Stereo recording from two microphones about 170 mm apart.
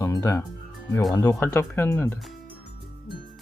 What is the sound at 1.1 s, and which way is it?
Speech, 20° left (ahead or behind).